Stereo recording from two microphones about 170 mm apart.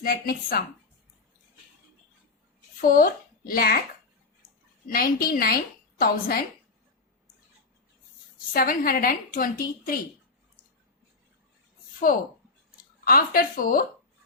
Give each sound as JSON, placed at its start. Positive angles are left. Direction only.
{"t": 0.0, "sound": "a woman's voice", "side_deg": 60}
{"t": 2.8, "sound": "speech", "side_deg": 55}
{"t": 4.9, "sound": "a woman's voice", "side_deg": 60}
{"t": 8.5, "sound": "a woman's voice", "side_deg": 55}
{"t": 13.1, "sound": "a woman's voice", "side_deg": 60}